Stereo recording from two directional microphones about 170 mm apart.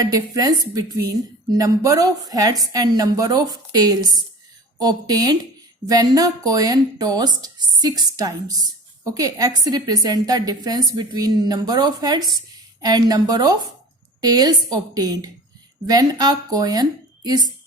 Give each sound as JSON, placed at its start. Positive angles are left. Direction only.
{"t": 0.0, "sound": "a woman's voice", "side_deg": -20}